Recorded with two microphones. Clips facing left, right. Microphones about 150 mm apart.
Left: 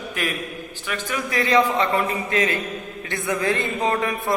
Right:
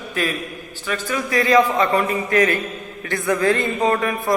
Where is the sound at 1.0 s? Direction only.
20° left (ahead or behind).